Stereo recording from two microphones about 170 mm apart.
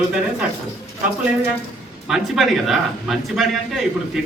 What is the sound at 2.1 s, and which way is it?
A man's voice, centre (ahead or behind).